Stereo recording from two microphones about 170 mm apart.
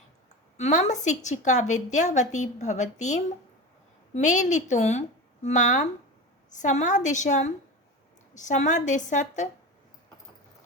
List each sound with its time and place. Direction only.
0.5 s a woman's voice: 40° left (ahead or behind)